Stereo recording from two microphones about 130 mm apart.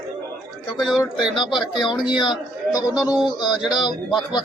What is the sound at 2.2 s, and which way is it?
Speech, 35° left (ahead or behind).